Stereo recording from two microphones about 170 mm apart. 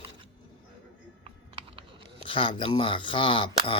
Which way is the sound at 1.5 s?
35° right (ahead or behind).